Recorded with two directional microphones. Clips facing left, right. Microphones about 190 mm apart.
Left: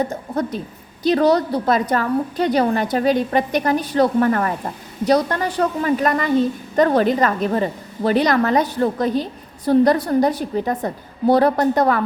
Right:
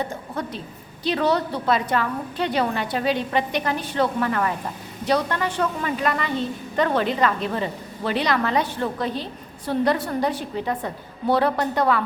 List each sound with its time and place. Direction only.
0.0 s a woman's voice: 40° left (ahead or behind)